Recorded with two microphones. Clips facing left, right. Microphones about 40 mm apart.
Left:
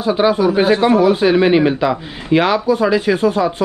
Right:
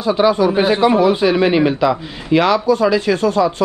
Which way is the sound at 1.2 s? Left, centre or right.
Centre.